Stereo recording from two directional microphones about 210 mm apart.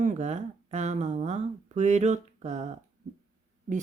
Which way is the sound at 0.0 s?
35° right (ahead or behind).